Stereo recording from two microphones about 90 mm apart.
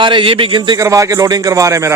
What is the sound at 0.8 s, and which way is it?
A man's voice, 35° right (ahead or behind).